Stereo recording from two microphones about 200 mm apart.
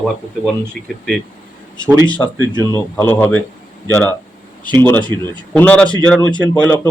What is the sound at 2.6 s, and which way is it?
Speech, 15° left (ahead or behind).